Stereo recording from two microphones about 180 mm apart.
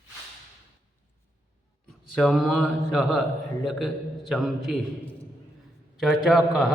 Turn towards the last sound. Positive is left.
turn(degrees=0)  # may be behind; listen again after turning